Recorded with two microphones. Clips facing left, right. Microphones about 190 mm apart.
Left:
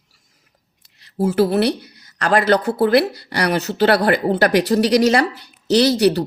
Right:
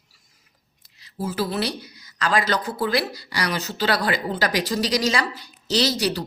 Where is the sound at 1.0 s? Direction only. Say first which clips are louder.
Left 10 dB; 65° left (ahead or behind).